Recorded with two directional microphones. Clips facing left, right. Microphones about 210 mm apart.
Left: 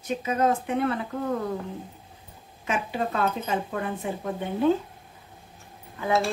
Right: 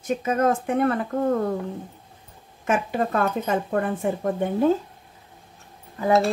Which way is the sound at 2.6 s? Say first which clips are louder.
Right 5 dB; 50° right (ahead or behind).